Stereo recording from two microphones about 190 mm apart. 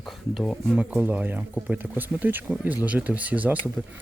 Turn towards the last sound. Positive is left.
turn(degrees=-10)  # may be behind; listen again after turning